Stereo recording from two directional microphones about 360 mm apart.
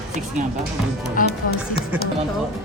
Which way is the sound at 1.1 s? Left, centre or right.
Left.